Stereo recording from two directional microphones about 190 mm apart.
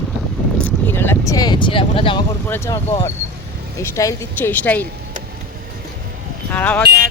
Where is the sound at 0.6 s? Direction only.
10° left (ahead or behind); by 2.2 s 25° left (ahead or behind).